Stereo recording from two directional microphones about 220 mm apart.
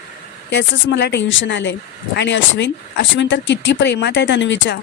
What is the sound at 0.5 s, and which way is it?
A woman's voice, 55° left (ahead or behind).